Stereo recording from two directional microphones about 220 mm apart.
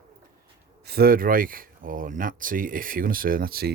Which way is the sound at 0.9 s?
45° right (ahead or behind).